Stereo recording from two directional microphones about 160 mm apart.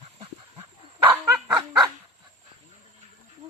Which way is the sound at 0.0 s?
35° right (ahead or behind).